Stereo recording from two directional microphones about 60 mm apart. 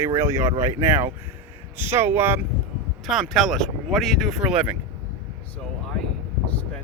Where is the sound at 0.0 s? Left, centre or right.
Right.